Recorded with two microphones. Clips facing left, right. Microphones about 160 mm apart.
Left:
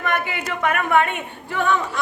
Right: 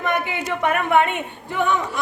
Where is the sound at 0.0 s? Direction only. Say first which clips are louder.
Right 1 dB; 20° right (ahead or behind).